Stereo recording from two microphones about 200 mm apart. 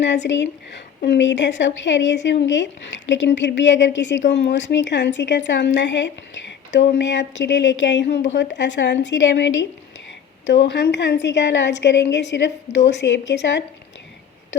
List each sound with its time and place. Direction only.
0.0 s a woman's voice: 60° left (ahead or behind)